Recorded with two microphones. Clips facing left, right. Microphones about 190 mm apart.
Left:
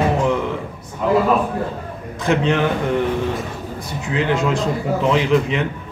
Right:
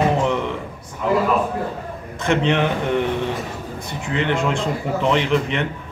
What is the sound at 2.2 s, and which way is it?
Speech, centre (ahead or behind).